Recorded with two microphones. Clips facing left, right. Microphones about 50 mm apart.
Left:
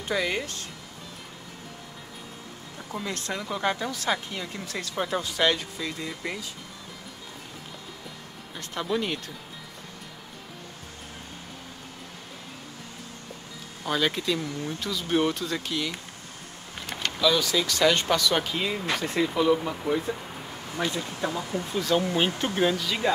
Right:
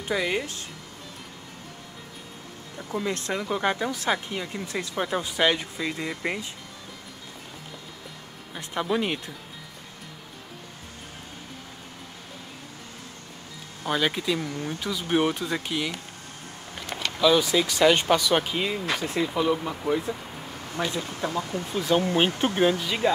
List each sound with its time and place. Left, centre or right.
0.1 s speech: centre
2.8 s speech: centre
3.1 s speech: right
4.9 s speech: centre
5.2 s speech: centre
8.5 s speech: centre
13.8 s speech: centre
17.2 s speech: centre
18.7 s speech: centre
21.2 s speech: centre
21.7 s speech: centre